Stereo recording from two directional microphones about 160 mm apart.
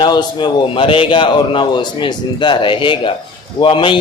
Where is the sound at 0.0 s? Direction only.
25° left (ahead or behind).